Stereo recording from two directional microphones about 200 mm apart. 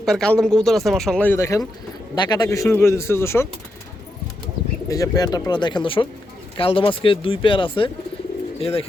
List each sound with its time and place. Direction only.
0.0 s speech: 5° left (ahead or behind)
4.9 s speech: 20° left (ahead or behind)